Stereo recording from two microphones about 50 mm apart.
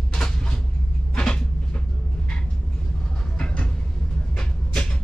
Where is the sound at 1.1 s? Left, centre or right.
Centre.